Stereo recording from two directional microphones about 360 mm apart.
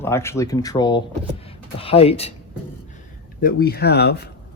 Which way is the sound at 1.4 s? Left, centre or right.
Centre.